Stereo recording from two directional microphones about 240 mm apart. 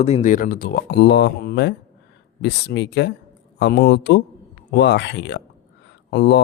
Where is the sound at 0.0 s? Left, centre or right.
Left.